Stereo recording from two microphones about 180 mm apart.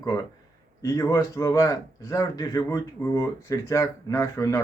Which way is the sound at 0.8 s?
15° left (ahead or behind).